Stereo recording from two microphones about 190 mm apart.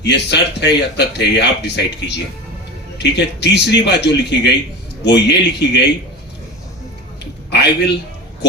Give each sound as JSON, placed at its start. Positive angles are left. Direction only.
{"t": 0.0, "sound": "speech", "side_deg": 65}
{"t": 7.5, "sound": "a man's voice", "side_deg": 60}